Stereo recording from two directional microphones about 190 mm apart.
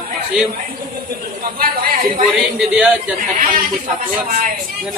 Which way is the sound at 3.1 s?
40° right (ahead or behind).